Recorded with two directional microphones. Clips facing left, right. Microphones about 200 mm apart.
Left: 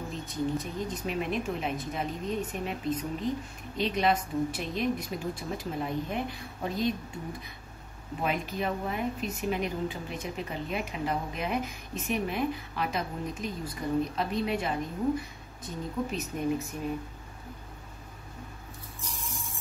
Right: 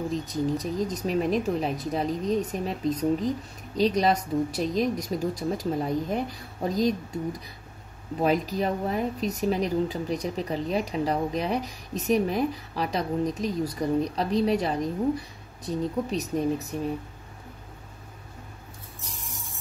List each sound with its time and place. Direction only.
0.1 s speech: 40° right (ahead or behind)